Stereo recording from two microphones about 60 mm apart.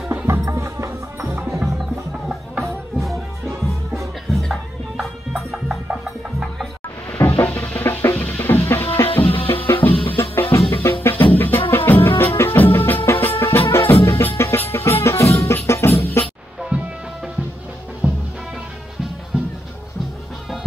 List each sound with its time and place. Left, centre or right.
0.3 s music: right
2.6 s music: centre
4.3 s music: centre
7.2 s music: left
7.5 s music: left
14.6 s music: left
15.0 s music: left
16.7 s music: centre
18.0 s music: right